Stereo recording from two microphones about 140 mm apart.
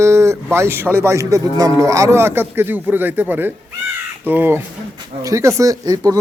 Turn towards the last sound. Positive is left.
turn(degrees=-25)  # may be behind; listen again after turning